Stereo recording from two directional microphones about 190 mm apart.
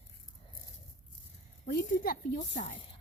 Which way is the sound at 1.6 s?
50° left (ahead or behind).